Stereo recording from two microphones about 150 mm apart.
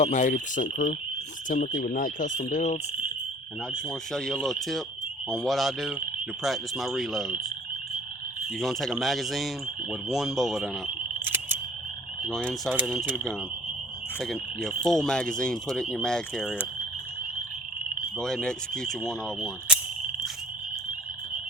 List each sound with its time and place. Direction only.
0.0 s speech: 50° left (ahead or behind)
3.7 s frog: 5° left (ahead or behind)
8.5 s frog: centre (ahead or behind)
11.3 s frog: 15° right (ahead or behind)
12.2 s frog: 5° left (ahead or behind)
14.2 s frog: centre (ahead or behind)
18.2 s frog: 5° left (ahead or behind)